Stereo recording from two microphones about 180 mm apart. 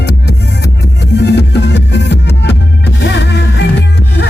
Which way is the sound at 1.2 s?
70° left (ahead or behind).